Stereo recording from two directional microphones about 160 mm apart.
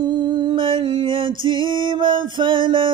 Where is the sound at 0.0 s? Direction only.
25° right (ahead or behind).